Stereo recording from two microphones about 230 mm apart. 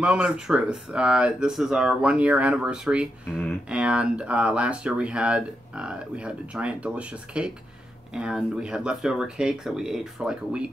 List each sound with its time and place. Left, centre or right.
0.0 s speech: centre